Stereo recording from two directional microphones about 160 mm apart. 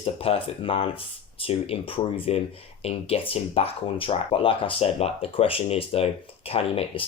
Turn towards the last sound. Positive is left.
turn(degrees=35)  # may be behind; listen again after turning